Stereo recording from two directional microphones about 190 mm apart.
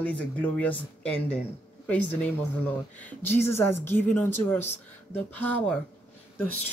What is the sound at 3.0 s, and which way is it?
A woman's voice, 10° left (ahead or behind).